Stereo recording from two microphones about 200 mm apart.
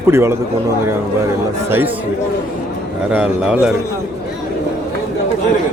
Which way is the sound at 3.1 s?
5° right (ahead or behind).